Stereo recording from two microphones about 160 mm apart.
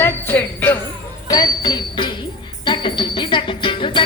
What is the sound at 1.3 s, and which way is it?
Music, 25° left (ahead or behind).